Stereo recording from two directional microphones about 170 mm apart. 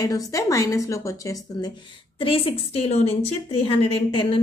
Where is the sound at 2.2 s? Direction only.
35° left (ahead or behind).